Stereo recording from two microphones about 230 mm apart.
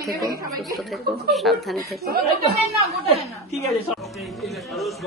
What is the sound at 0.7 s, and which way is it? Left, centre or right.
A woman's voice, centre.